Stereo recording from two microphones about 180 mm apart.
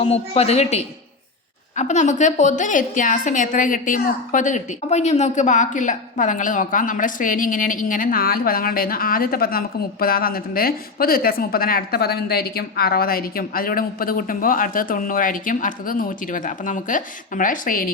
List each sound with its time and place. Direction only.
0.0 s a man's voice: 35° left (ahead or behind); by 17.9 s 50° left (ahead or behind)